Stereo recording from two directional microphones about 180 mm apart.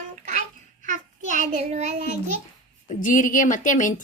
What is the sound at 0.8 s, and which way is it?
Child singing, 45° right (ahead or behind).